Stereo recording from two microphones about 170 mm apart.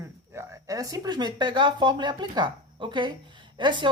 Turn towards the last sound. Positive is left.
turn(degrees=-25)  # may be behind; listen again after turning